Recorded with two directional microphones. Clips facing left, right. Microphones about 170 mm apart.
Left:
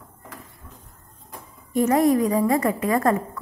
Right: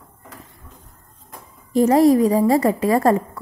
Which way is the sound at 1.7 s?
30° right (ahead or behind).